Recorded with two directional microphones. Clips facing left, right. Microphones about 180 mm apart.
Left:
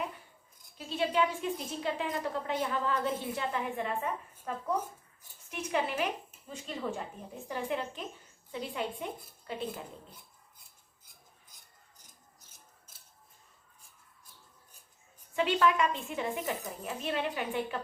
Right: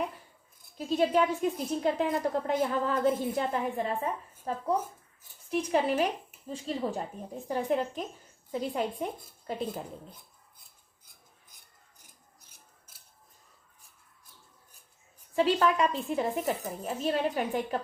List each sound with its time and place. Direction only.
0.8 s a woman's voice: 40° right (ahead or behind)
15.4 s a woman's voice: 35° right (ahead or behind)